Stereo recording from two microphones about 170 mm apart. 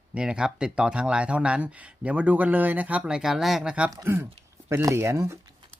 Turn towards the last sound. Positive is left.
turn(degrees=-15)  # may be behind; listen again after turning